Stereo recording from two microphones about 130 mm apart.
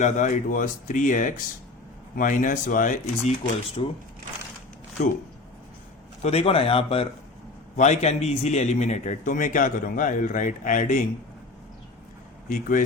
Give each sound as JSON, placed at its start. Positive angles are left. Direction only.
{"t": 0.0, "sound": "a man's voice", "side_deg": 75}
{"t": 2.1, "sound": "speech", "side_deg": 90}
{"t": 3.2, "sound": "speech", "side_deg": 45}
{"t": 5.0, "sound": "speech", "side_deg": 55}
{"t": 6.2, "sound": "speech", "side_deg": 50}
{"t": 7.8, "sound": "a man's voice", "side_deg": 60}
{"t": 12.5, "sound": "speech", "side_deg": 90}